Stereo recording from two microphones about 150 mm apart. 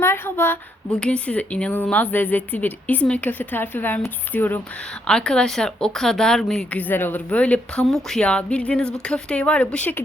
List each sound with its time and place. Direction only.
0.0 s a woman's voice: 15° left (ahead or behind)